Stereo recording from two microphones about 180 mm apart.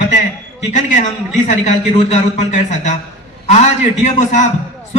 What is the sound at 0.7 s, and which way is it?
A man's voice, 45° left (ahead or behind).